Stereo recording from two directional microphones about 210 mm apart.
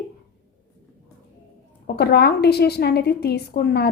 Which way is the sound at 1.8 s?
50° left (ahead or behind).